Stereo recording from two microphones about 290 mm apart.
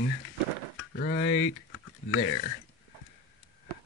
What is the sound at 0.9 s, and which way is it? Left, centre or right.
Speech, left.